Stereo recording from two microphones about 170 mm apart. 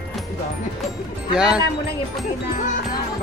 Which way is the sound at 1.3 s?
5° right (ahead or behind).